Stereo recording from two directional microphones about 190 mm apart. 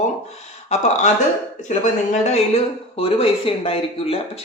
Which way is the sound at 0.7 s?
35° left (ahead or behind).